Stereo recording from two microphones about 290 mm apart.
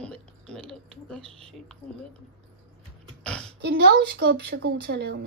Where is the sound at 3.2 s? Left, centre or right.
Centre.